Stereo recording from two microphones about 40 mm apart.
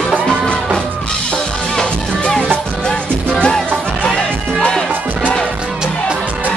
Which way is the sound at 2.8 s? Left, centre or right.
Centre.